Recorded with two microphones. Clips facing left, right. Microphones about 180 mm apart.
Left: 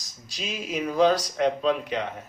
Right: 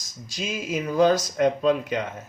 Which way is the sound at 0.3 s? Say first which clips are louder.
Right 2 dB; 45° right (ahead or behind).